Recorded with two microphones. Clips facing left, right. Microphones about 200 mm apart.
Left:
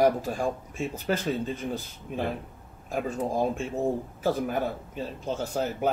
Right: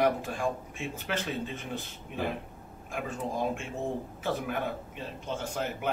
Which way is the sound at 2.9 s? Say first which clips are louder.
Left 6 dB; 40° left (ahead or behind).